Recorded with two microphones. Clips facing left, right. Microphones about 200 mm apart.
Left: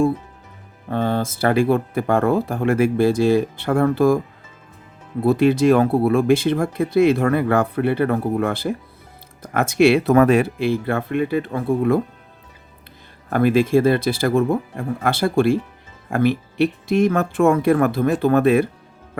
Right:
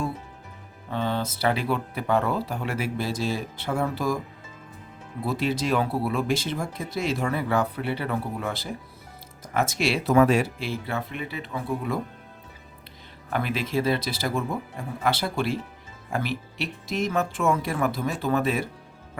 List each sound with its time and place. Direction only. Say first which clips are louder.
0.9 s speech: left 6 dB; 50° left (ahead or behind)
5.2 s speech: left 11 dB; 55° left (ahead or behind)
13.3 s speech: left 11 dB; 50° left (ahead or behind)